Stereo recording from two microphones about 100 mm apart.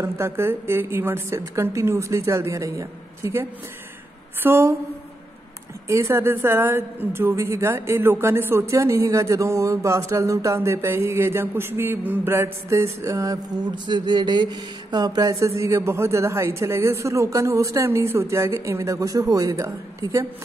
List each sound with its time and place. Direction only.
0.0 s a woman's voice: 25° right (ahead or behind)
5.9 s a woman's voice: 30° right (ahead or behind)
13.8 s a sound: 50° right (ahead or behind); by 20.2 s 30° right (ahead or behind)